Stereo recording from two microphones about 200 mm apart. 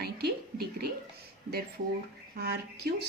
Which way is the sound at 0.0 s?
50° right (ahead or behind).